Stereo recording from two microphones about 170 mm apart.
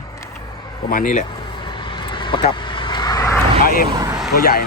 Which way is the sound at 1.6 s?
30° left (ahead or behind).